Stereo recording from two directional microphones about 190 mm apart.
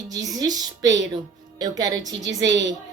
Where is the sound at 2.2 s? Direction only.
75° right (ahead or behind).